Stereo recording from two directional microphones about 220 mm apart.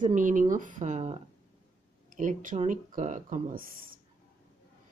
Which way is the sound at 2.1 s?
35° right (ahead or behind).